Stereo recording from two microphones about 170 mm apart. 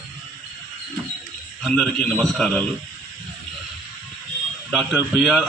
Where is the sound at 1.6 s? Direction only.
5° left (ahead or behind).